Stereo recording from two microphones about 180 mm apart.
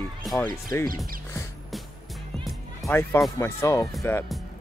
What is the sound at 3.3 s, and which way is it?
Speech, 15° left (ahead or behind).